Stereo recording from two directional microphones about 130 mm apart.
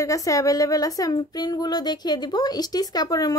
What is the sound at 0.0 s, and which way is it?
Speech, 25° left (ahead or behind).